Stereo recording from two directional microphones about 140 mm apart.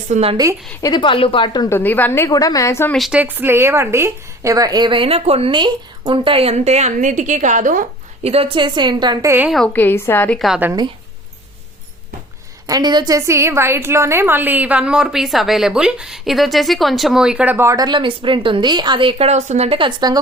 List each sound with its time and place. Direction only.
0.1 s a woman's voice: 45° right (ahead or behind)
0.8 s a woman's voice: 30° left (ahead or behind)
1.7 s a woman's voice: 10° left (ahead or behind)
2.3 s a woman's voice: 25° left (ahead or behind)
2.9 s a woman's voice: centre (ahead or behind)
3.2 s a woman's voice: 15° right (ahead or behind); by 7.9 s 75° right (ahead or behind)
8.2 s a woman's voice: 45° right (ahead or behind)
9.2 s a woman's voice: 15° right (ahead or behind)
9.7 s a woman's voice: 15° left (ahead or behind)
10.3 s a woman's voice: centre (ahead or behind)
12.6 s a woman's voice: 30° right (ahead or behind)
19.3 s a woman's voice: 55° right (ahead or behind)
20.0 s a woman's voice: 30° right (ahead or behind)